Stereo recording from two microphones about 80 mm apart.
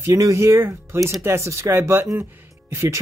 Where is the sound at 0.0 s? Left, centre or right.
Right.